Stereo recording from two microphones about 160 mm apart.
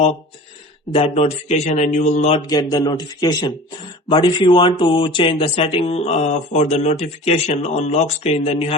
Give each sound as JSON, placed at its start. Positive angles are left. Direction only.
{"t": 0.9, "sound": "a man's voice", "side_deg": 35}
{"t": 2.5, "sound": "speech", "side_deg": 25}